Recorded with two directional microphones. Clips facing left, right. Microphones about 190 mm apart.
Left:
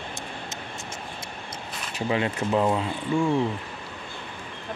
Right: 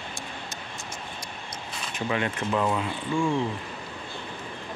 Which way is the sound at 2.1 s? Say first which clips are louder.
Left 3 dB; 25° left (ahead or behind).